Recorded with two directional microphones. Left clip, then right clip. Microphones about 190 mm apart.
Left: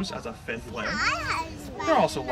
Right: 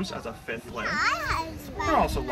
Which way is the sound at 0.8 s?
60° right (ahead or behind).